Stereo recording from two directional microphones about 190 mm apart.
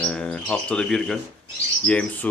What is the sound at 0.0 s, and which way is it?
Bird, 5° left (ahead or behind).